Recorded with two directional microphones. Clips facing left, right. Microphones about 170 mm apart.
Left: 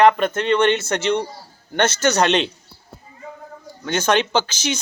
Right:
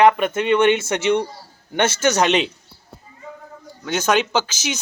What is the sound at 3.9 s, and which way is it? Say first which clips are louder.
Speech: even; 5° right (ahead or behind).